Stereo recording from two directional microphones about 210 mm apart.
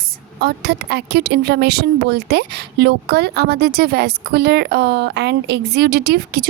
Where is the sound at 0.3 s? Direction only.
50° right (ahead or behind).